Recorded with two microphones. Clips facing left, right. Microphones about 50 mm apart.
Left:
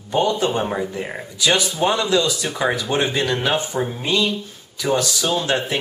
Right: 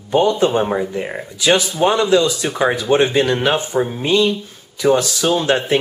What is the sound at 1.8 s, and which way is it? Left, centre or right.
Speech, right.